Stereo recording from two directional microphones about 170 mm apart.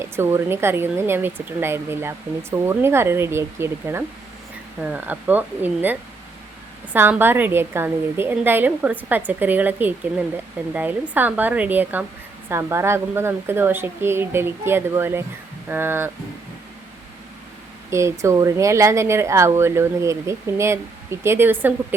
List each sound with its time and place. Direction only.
0.0 s speech: 15° right (ahead or behind)
17.9 s speech: 15° right (ahead or behind)